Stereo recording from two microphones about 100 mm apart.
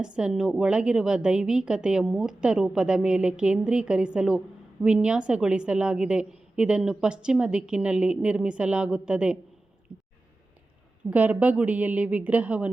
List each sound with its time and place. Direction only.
0.0 s a woman's voice: 10° right (ahead or behind)
11.1 s a woman's voice: 15° right (ahead or behind)